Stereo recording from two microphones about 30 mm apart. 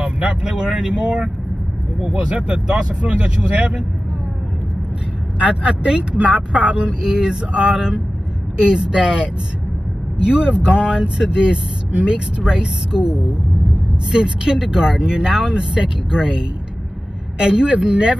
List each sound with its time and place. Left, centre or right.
0.0 s vehicle: right
0.4 s vehicle: right
2.0 s speech: right
5.4 s speech: right
5.9 s speech: right
11.9 s speech: right